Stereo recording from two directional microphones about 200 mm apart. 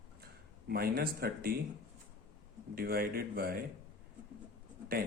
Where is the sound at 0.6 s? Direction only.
50° right (ahead or behind).